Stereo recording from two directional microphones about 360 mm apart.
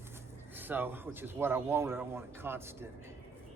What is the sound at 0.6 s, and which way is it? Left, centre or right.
Speech, centre.